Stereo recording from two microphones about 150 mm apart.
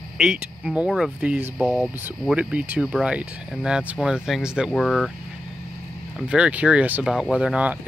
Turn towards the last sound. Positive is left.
turn(degrees=-10)  # may be behind; listen again after turning